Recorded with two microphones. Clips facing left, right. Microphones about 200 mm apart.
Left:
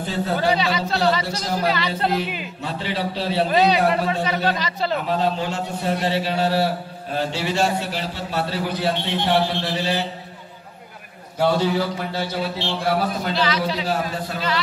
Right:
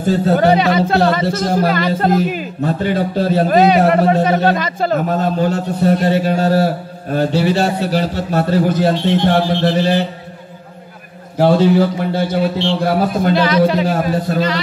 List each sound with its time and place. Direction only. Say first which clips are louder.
0.0 s a man's voice: right 9 dB; 45° right (ahead or behind)
11.6 s a man's voice: right 9 dB; 55° right (ahead or behind)